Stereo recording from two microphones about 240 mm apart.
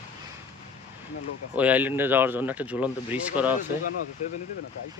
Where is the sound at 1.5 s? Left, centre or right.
Centre.